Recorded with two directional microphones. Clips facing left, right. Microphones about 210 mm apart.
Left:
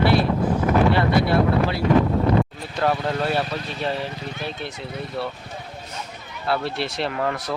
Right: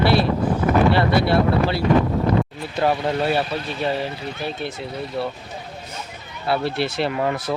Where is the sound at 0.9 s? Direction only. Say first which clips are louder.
Right 1 dB; 30° right (ahead or behind).